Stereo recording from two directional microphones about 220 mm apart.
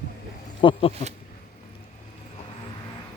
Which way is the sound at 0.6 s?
20° left (ahead or behind).